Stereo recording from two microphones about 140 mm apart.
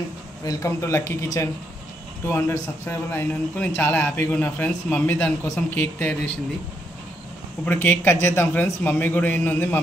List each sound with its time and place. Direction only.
0.5 s a man's voice: 20° left (ahead or behind)
7.6 s a man's voice: 15° left (ahead or behind)